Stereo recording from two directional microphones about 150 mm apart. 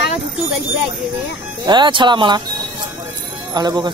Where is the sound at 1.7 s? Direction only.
30° right (ahead or behind).